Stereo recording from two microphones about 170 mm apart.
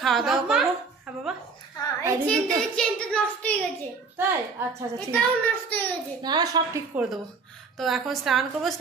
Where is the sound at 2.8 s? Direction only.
5° left (ahead or behind).